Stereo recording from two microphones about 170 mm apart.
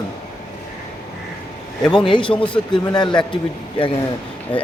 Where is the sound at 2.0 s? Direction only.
30° left (ahead or behind).